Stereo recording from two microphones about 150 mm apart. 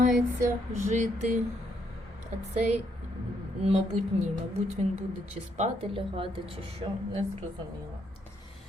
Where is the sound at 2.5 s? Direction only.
50° right (ahead or behind).